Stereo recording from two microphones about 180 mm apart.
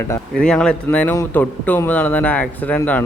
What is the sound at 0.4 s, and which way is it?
Speech, 5° left (ahead or behind).